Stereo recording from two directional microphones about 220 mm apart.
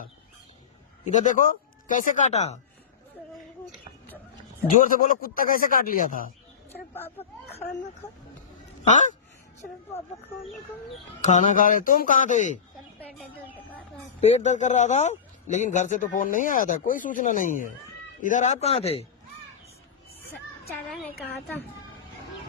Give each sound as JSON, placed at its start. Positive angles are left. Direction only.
{"t": 1.0, "sound": "a man's voice", "side_deg": 35}
{"t": 3.3, "sound": "a sound", "side_deg": 0}
{"t": 4.8, "sound": "a man's voice", "side_deg": 40}
{"t": 6.7, "sound": "a woman's voice", "side_deg": 10}
{"t": 8.8, "sound": "speech", "side_deg": 35}
{"t": 11.2, "sound": "a man's voice", "side_deg": 35}
{"t": 14.2, "sound": "a man's voice", "side_deg": 30}
{"t": 20.9, "sound": "a woman's voice", "side_deg": 0}